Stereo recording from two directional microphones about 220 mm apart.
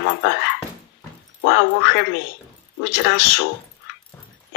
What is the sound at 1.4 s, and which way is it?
A man's voice, 50° left (ahead or behind).